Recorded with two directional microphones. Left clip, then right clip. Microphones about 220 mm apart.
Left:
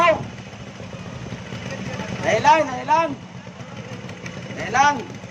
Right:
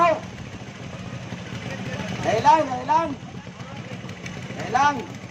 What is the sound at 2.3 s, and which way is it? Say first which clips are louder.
Speech: left 2 dB; 25° left (ahead or behind).